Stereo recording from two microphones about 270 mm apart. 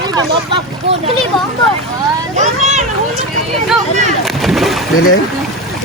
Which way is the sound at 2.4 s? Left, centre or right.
Right.